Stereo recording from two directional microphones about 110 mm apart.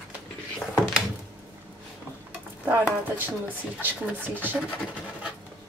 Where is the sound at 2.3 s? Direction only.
15° right (ahead or behind).